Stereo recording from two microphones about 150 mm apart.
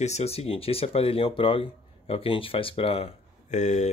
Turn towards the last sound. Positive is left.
turn(degrees=50)  # may be behind; listen again after turning